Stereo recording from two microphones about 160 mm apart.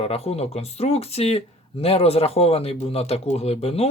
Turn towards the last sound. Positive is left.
turn(degrees=40)  # may be behind; listen again after turning